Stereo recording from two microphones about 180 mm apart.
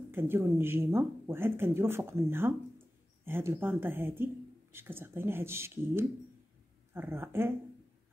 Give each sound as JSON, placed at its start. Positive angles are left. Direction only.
{"t": 0.1, "sound": "speech", "side_deg": -15}